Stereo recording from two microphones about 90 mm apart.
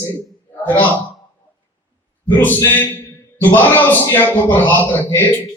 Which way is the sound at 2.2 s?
20° left (ahead or behind).